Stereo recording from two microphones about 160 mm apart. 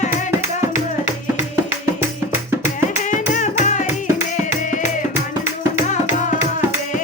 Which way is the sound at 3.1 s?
50° left (ahead or behind).